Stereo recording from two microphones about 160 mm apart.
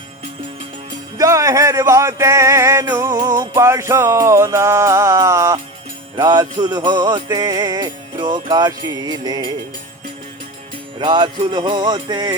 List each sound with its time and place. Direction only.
1.2 s music: 20° right (ahead or behind)
11.0 s music: 30° right (ahead or behind)